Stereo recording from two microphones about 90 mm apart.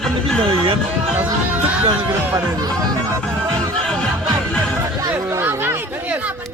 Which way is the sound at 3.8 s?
5° left (ahead or behind).